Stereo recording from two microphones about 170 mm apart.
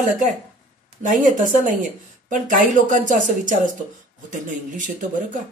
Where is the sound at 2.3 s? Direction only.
50° right (ahead or behind).